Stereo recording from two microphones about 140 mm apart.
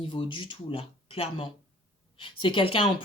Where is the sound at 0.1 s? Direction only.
35° left (ahead or behind).